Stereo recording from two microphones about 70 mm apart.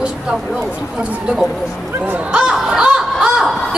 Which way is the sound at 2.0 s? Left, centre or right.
Right.